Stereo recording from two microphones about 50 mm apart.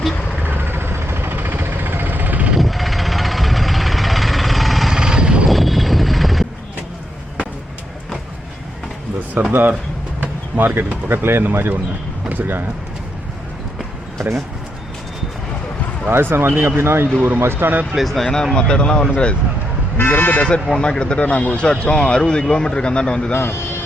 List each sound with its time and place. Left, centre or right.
0.4 s vehicle: right
2.6 s vehicle: centre
4.9 s vehicle: centre
5.5 s vehicle: centre
9.5 s speech: right
10.8 s speech: right
16.0 s speech: right
17.9 s speech: centre; by 19.4 s left
20.1 s speech: left
20.7 s speech: centre
23.5 s vehicle: left